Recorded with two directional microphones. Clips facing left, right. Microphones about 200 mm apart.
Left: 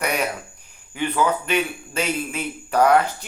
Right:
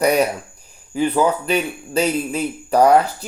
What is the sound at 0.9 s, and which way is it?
Speech, 35° right (ahead or behind).